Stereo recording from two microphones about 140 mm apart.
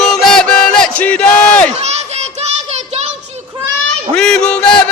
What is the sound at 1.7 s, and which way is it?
Children playing, 50° right (ahead or behind).